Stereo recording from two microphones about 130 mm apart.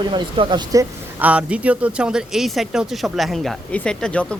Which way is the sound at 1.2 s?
10° right (ahead or behind).